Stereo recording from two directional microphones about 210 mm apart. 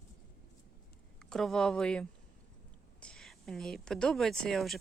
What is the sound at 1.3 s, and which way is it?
Speech, centre (ahead or behind).